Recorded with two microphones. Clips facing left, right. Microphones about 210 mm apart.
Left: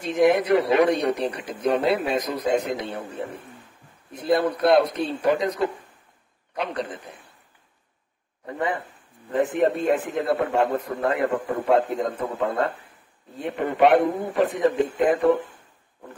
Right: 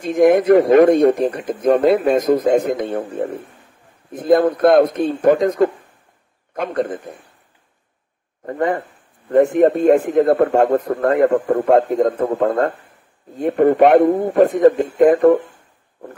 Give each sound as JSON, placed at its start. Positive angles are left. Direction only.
{"t": 0.0, "sound": "a man's voice", "side_deg": -50}
{"t": 8.5, "sound": "a man's voice", "side_deg": -50}